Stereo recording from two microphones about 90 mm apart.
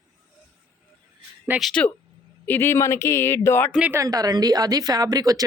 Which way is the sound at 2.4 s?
25° left (ahead or behind).